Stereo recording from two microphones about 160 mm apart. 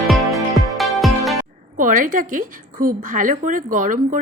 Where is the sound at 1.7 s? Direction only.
55° right (ahead or behind).